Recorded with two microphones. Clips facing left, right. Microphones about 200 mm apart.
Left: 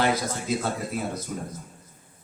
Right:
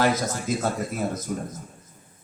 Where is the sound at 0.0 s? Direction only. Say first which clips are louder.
Right 2 dB; 45° right (ahead or behind).